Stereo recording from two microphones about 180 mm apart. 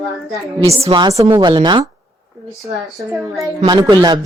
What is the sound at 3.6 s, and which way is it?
Speech, 25° right (ahead or behind).